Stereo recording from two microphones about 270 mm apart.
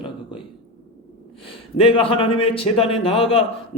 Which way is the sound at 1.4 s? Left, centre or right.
Centre.